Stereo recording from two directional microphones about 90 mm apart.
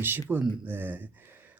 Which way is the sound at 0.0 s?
25° right (ahead or behind).